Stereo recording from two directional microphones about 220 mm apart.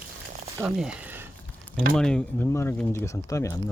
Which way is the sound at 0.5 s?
10° right (ahead or behind).